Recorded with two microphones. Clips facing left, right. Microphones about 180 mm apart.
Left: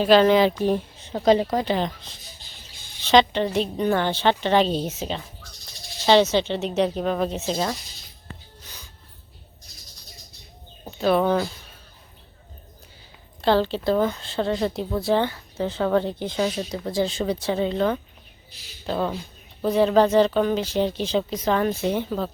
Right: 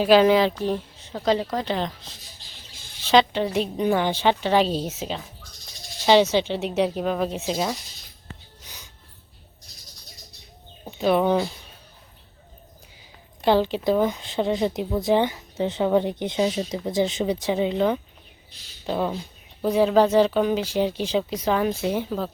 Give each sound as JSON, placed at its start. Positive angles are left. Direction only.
{"t": 0.0, "sound": "speech", "side_deg": -10}
{"t": 1.1, "sound": "speech", "side_deg": 20}
{"t": 1.6, "sound": "speech", "side_deg": 0}
{"t": 8.6, "sound": "music", "side_deg": -15}
{"t": 10.9, "sound": "speech", "side_deg": -15}
{"t": 13.4, "sound": "speech", "side_deg": -15}